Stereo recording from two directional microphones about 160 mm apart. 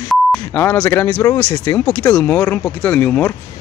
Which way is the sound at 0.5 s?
15° left (ahead or behind).